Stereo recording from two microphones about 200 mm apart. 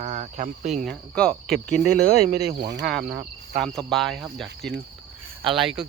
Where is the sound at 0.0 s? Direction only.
35° right (ahead or behind).